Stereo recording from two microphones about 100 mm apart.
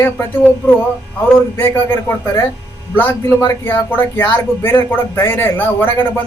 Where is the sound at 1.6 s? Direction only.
25° left (ahead or behind).